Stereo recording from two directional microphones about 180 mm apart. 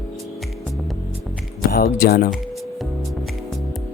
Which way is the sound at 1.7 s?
55° left (ahead or behind).